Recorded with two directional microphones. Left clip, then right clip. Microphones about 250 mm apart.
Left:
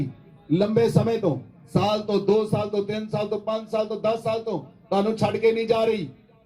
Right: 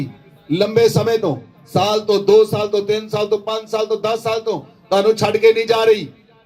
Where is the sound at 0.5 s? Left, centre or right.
Right.